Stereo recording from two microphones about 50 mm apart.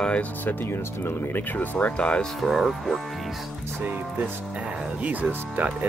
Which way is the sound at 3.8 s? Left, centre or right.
Right.